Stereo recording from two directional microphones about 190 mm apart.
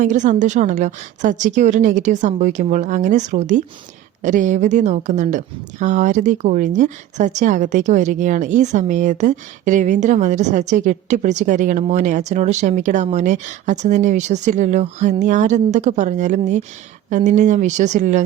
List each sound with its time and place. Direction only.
0.0 s a woman's voice: 40° right (ahead or behind)